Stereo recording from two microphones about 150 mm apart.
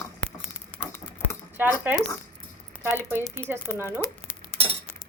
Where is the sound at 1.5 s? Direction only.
15° right (ahead or behind).